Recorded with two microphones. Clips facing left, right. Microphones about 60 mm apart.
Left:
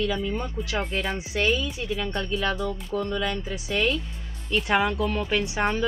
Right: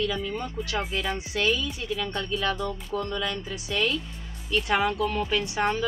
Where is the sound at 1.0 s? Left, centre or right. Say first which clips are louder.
Left 1 dB; left.